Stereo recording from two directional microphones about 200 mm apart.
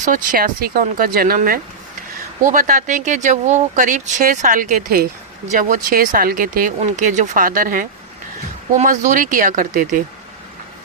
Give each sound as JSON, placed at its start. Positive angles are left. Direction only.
{"t": 0.0, "sound": "speech", "side_deg": -40}